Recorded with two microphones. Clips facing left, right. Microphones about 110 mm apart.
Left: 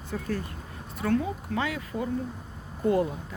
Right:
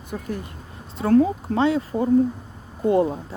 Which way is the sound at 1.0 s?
35° right (ahead or behind).